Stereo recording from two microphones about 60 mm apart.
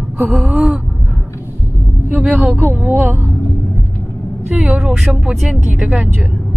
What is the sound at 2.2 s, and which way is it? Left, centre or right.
Speech, centre.